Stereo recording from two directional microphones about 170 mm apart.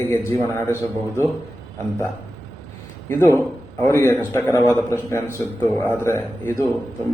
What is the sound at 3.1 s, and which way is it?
A man's voice, 15° left (ahead or behind).